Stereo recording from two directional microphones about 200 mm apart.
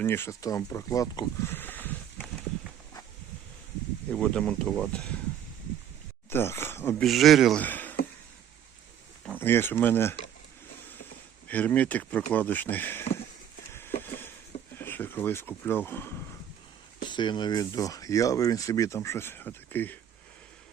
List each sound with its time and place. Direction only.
0.0 s speech: 10° left (ahead or behind)
4.1 s speech: 5° left (ahead or behind)
6.3 s speech: 10° left (ahead or behind)
7.0 s speech: centre (ahead or behind)
9.4 s speech: 10° left (ahead or behind)
11.4 s speech: 10° left (ahead or behind)
13.7 s a sound: 10° left (ahead or behind)
14.8 s speech: 10° left (ahead or behind)
17.0 s speech: 25° left (ahead or behind)